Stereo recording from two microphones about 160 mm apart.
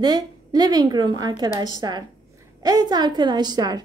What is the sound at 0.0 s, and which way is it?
A woman's voice, 25° right (ahead or behind).